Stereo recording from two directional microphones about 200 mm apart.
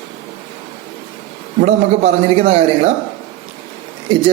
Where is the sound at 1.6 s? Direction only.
30° right (ahead or behind).